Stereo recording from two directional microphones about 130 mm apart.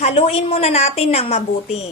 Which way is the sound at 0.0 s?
50° left (ahead or behind).